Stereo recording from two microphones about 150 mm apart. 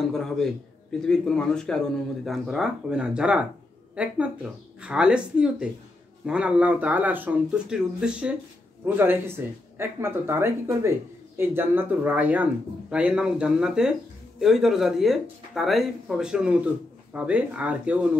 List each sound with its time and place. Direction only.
0.0 s speech: 5° left (ahead or behind)